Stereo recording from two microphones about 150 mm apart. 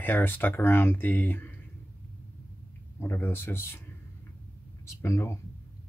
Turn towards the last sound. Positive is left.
turn(degrees=20)  # may be behind; listen again after turning